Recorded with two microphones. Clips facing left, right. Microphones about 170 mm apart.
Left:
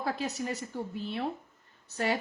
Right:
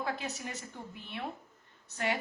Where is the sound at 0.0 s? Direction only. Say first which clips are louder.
Left 4 dB; 35° left (ahead or behind).